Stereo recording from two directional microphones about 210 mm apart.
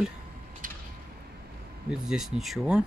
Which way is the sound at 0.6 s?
40° right (ahead or behind).